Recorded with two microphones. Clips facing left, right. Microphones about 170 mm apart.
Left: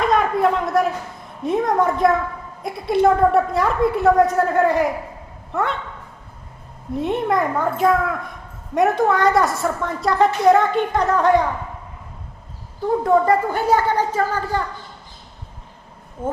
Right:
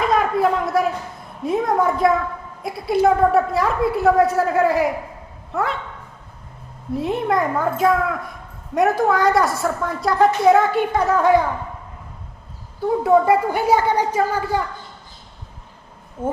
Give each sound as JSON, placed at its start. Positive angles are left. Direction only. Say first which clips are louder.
{"t": 0.0, "sound": "a sound", "louder": "even", "side_deg": 0}
{"t": 1.5, "sound": "a woman's voice", "louder": "even", "side_deg": 0}
{"t": 6.9, "sound": "a woman's voice", "louder": "even", "side_deg": 0}
{"t": 13.0, "sound": "speech", "louder": "right 1 dB", "side_deg": -10}